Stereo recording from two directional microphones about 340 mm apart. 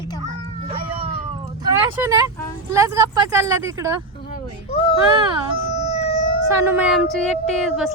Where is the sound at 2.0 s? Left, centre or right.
Centre.